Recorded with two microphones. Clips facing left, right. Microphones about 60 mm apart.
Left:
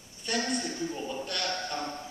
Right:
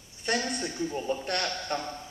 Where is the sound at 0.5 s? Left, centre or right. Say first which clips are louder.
Right 1 dB; right.